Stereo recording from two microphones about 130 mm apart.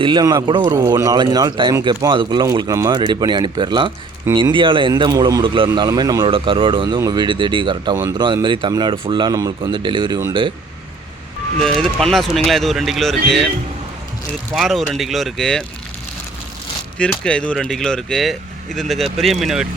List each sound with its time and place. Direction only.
0.0 s speech: 35° right (ahead or behind)
6.3 s speech: 40° right (ahead or behind)
11.5 s speech: 5° left (ahead or behind)
14.5 s speech: centre (ahead or behind)
17.2 s speech: 10° left (ahead or behind)